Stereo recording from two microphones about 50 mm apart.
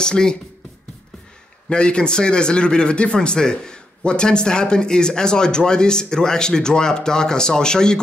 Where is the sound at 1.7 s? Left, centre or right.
Centre.